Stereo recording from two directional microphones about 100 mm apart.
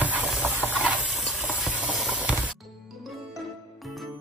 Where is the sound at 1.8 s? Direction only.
5° right (ahead or behind).